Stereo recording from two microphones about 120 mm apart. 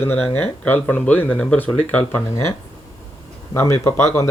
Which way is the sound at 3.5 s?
25° left (ahead or behind).